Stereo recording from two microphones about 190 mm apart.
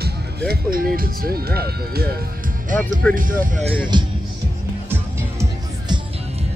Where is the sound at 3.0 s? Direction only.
5° left (ahead or behind).